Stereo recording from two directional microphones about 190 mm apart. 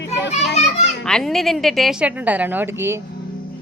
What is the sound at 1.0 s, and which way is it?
A woman's voice, centre (ahead or behind).